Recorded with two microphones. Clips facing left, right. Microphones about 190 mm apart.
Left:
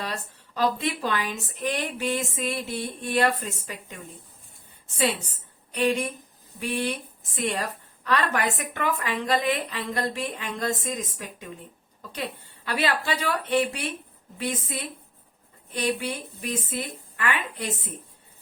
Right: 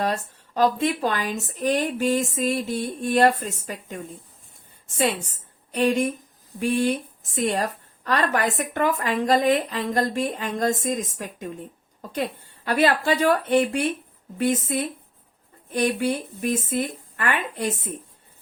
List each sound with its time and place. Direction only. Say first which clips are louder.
0.0 s a woman's voice: right 8 dB; 45° right (ahead or behind)